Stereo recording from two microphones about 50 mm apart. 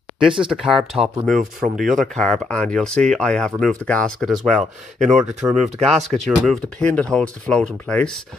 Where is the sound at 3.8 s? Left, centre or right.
Centre.